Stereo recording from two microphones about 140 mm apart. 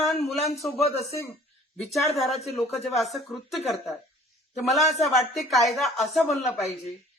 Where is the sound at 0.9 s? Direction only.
50° left (ahead or behind).